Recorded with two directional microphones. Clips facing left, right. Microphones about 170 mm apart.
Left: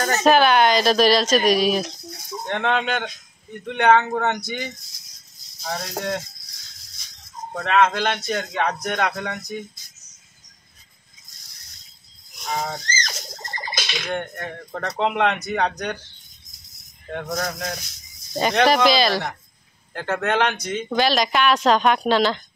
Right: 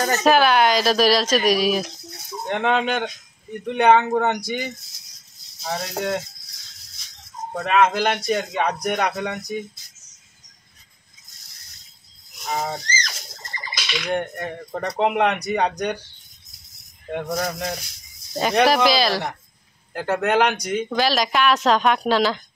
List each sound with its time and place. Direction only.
0.0 s speech: 5° right (ahead or behind)
7.5 s speech: 10° right (ahead or behind)
12.4 s speech: 5° right (ahead or behind)
13.6 s a sound: 55° left (ahead or behind)
14.0 s speech: 10° right (ahead or behind)
17.1 s speech: 10° right (ahead or behind)
19.9 s speech: 15° right (ahead or behind)
20.9 s speech: centre (ahead or behind)